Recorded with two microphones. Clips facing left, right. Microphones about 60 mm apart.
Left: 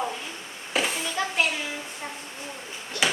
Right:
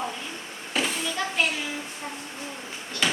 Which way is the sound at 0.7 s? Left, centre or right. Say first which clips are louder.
Left 1 dB; centre.